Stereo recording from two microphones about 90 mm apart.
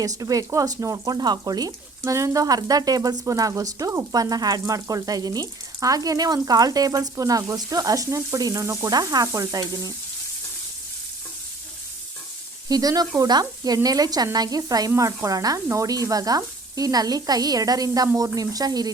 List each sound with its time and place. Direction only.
0.0 s speech: 40° right (ahead or behind)
1.0 s speech: 50° right (ahead or behind); by 8.9 s 30° right (ahead or behind)
8.9 s speech: 45° right (ahead or behind)
12.6 s speech: 45° right (ahead or behind)